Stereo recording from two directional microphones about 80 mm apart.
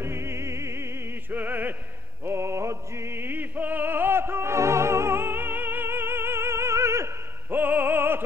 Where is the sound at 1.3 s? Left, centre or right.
Right.